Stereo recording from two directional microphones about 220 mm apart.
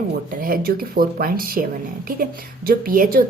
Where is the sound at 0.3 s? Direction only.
40° right (ahead or behind).